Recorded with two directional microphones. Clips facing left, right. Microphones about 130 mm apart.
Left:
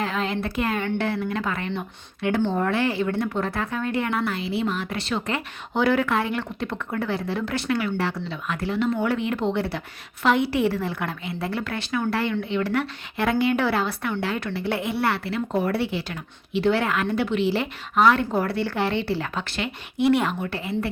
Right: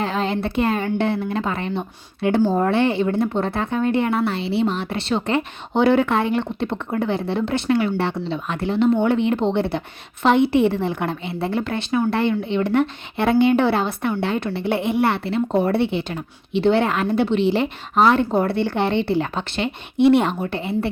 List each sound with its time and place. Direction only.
0.0 s a woman's voice: 30° right (ahead or behind)